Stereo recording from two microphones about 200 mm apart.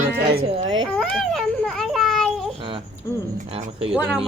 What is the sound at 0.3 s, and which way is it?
Speech, 25° right (ahead or behind).